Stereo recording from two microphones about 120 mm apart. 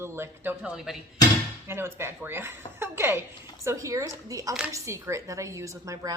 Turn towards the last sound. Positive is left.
turn(degrees=-25)  # may be behind; listen again after turning